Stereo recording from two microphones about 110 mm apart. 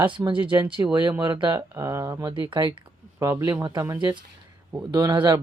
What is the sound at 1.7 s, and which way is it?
Speech, 25° right (ahead or behind).